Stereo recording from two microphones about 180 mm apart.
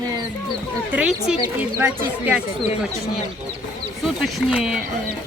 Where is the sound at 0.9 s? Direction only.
5° right (ahead or behind).